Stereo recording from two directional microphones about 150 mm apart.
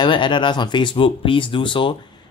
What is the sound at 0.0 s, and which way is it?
Speech, 30° left (ahead or behind).